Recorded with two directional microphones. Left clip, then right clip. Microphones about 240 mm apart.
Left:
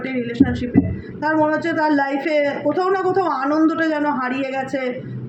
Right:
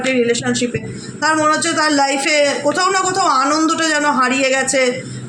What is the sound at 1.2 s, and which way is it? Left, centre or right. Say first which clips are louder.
A man's voice: right 4 dB; right.